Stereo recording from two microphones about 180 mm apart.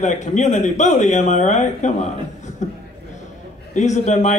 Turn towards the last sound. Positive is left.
turn(degrees=40)  # may be behind; listen again after turning